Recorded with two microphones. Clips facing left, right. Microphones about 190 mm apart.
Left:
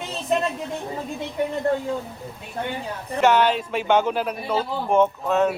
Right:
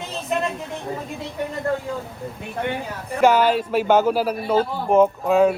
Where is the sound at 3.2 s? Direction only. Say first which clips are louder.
Right 2 dB; 10° right (ahead or behind).